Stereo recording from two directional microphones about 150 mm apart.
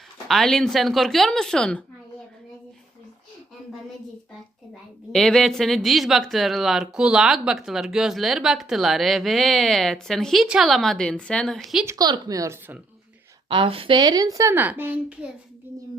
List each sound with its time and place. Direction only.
0.3 s speech: 5° left (ahead or behind)
5.1 s speech: centre (ahead or behind)
11.9 s a woman's voice: 25° right (ahead or behind)
13.5 s a woman's voice: 35° right (ahead or behind); by 15.3 s 10° right (ahead or behind)